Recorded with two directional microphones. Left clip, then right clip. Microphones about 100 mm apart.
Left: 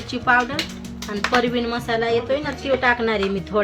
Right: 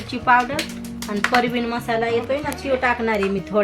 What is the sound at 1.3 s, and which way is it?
Speech, 20° right (ahead or behind).